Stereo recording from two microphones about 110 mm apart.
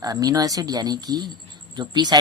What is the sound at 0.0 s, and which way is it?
Speech, 35° right (ahead or behind).